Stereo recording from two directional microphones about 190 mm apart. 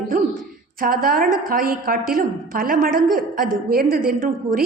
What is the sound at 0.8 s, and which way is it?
A woman's voice, 50° right (ahead or behind).